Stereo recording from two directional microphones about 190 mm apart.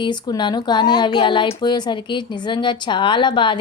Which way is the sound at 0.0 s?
25° left (ahead or behind).